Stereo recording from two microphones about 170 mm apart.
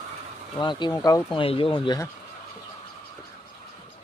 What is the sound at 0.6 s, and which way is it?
Speech, 25° left (ahead or behind).